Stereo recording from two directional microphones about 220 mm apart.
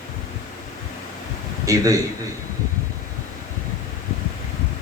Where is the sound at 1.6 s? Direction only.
15° right (ahead or behind).